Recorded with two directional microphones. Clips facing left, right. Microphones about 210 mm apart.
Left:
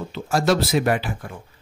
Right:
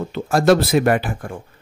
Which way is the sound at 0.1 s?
55° right (ahead or behind).